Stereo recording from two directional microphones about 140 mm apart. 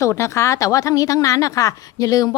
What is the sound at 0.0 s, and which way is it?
A woman's voice, 20° left (ahead or behind).